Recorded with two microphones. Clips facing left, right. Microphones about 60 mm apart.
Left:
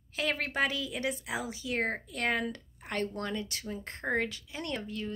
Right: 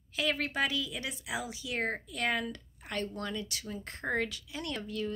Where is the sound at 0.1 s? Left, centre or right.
Left.